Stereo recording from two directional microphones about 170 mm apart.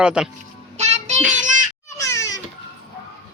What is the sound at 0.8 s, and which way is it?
Child singing, 40° right (ahead or behind).